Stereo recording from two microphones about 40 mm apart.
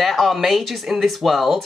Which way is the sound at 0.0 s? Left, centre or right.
Centre.